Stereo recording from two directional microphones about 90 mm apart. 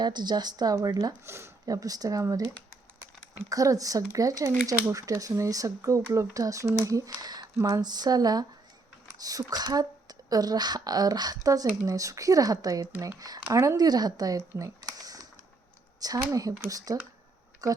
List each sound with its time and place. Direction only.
0.0 s speech: 55° right (ahead or behind)
1.2 s speech: 30° right (ahead or behind)
1.6 s speech: 40° right (ahead or behind)
3.5 s speech: 40° right (ahead or behind)
14.6 s a sound: 45° right (ahead or behind)
16.0 s speech: 40° right (ahead or behind)